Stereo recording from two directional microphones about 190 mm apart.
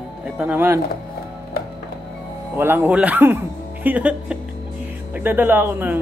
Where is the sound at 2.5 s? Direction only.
10° right (ahead or behind).